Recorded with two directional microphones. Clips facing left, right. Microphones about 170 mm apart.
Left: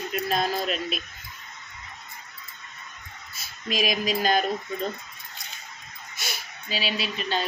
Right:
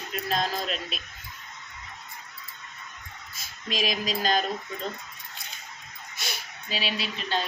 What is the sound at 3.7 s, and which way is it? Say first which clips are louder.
Speech: left 3 dB; 10° left (ahead or behind).